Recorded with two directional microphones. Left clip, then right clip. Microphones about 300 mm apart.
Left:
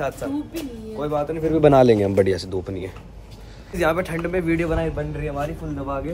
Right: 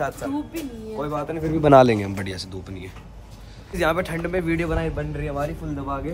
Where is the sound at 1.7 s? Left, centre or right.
Right.